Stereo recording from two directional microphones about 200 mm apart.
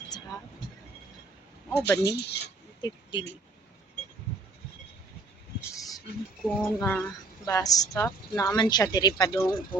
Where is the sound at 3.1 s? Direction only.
25° left (ahead or behind).